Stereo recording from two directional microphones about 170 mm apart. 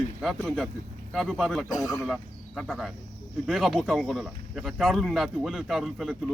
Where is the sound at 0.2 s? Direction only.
Centre (ahead or behind).